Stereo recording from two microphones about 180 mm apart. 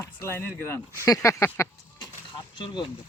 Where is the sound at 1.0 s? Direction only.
20° left (ahead or behind).